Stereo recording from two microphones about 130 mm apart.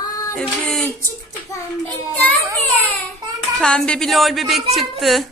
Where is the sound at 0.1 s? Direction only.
25° left (ahead or behind).